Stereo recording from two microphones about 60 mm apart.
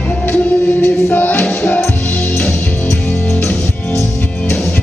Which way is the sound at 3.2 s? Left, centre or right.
Centre.